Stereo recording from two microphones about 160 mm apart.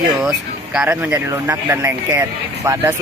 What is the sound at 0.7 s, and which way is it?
Speech, 5° right (ahead or behind).